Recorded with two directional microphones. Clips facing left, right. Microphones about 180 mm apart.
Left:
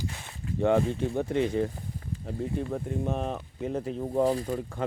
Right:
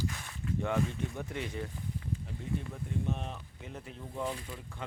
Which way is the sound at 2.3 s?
40° left (ahead or behind).